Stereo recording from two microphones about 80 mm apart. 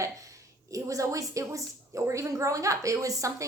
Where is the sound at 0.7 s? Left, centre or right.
Right.